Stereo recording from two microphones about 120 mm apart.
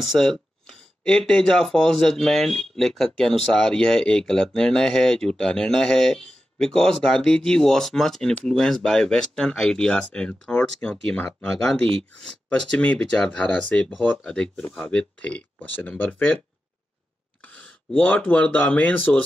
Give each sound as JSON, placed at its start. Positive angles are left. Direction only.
{"t": 0.0, "sound": "speech", "side_deg": 0}
{"t": 11.8, "sound": "speech", "side_deg": -50}
{"t": 12.2, "sound": "speech", "side_deg": 5}
{"t": 17.4, "sound": "speech", "side_deg": 10}